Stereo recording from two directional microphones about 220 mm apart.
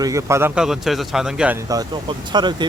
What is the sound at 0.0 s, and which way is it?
Speech, 15° right (ahead or behind).